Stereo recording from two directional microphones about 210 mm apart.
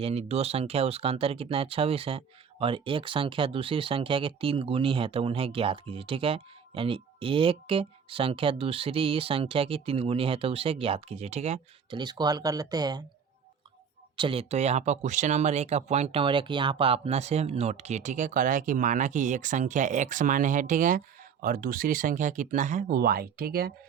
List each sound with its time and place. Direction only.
0.0 s speech: 30° right (ahead or behind)
14.2 s speech: 25° right (ahead or behind); by 23.7 s 45° right (ahead or behind)